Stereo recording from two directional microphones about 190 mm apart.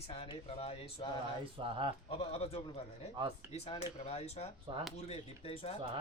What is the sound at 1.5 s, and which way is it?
Speech, 25° right (ahead or behind).